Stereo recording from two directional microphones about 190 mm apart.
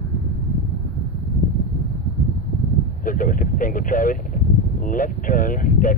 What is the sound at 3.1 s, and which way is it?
Speech, 45° left (ahead or behind).